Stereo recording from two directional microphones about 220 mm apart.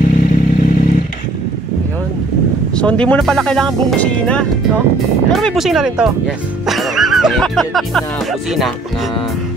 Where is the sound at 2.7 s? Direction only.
5° left (ahead or behind).